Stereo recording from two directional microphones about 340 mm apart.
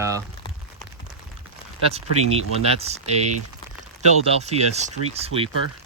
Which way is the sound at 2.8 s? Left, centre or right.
Centre.